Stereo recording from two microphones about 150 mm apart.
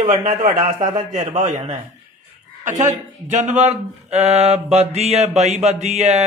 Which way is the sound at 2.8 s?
55° right (ahead or behind).